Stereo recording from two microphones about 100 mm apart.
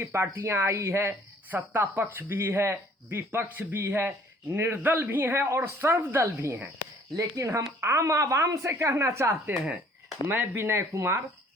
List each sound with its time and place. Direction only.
0.0 s speech: 25° right (ahead or behind)